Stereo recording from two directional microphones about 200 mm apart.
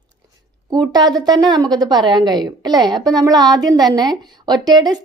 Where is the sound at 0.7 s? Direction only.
20° right (ahead or behind).